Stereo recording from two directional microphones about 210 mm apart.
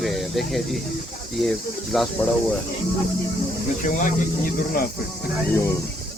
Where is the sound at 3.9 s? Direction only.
40° left (ahead or behind).